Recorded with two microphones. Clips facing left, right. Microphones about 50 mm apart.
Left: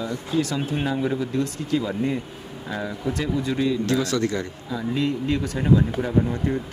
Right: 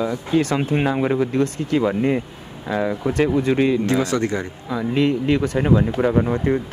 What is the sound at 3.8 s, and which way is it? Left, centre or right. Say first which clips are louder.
Speech: right 3 dB; right.